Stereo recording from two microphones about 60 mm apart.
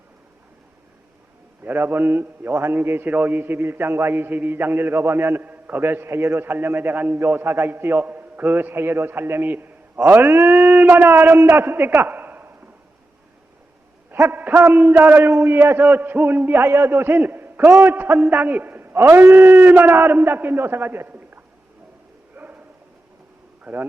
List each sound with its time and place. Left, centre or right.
1.6 s a man's voice: right
2.7 s a man's voice: right
10.0 s a man's voice: right
14.2 s a man's voice: right
15.3 s a man's voice: right
18.3 s a man's voice: right
22.4 s a sound: right
23.7 s speech: right